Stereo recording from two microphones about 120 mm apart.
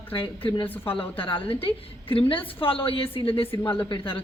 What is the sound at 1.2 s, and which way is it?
A woman's voice, 45° left (ahead or behind).